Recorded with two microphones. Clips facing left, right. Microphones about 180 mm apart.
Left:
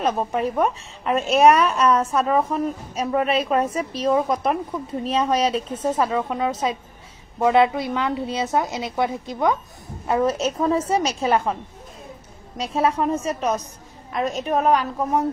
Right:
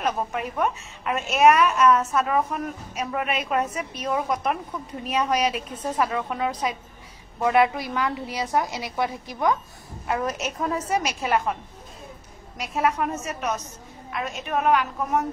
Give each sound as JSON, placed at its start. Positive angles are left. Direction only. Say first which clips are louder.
{"t": 0.0, "sound": "a woman's voice", "louder": "left 5 dB", "side_deg": 30}
{"t": 12.5, "sound": "a woman's voice", "louder": "left 3 dB", "side_deg": 30}